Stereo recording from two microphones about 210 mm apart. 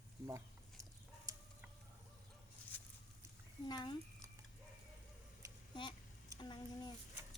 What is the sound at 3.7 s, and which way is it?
Speech, 20° left (ahead or behind).